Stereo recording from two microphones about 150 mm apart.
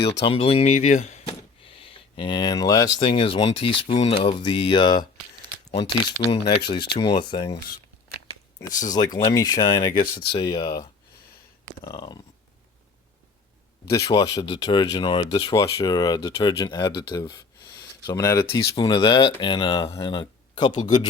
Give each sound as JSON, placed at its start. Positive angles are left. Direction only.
{"t": 0.3, "sound": "speech", "side_deg": 40}
{"t": 3.0, "sound": "speech", "side_deg": 35}
{"t": 6.9, "sound": "speech", "side_deg": 90}
{"t": 7.2, "sound": "speech", "side_deg": 30}
{"t": 8.9, "sound": "speech", "side_deg": 25}
{"t": 11.8, "sound": "speech", "side_deg": 25}
{"t": 14.1, "sound": "speech", "side_deg": 25}
{"t": 18.9, "sound": "speech", "side_deg": 35}